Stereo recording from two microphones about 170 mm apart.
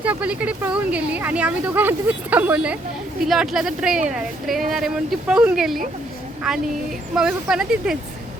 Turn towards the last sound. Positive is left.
turn(degrees=-5)  # may be behind; listen again after turning